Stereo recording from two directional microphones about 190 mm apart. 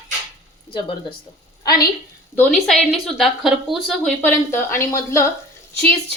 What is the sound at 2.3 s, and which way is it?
Speech, 5° left (ahead or behind).